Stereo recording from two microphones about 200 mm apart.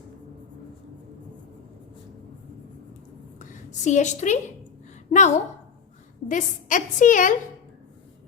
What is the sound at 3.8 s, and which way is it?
Speech, 35° left (ahead or behind).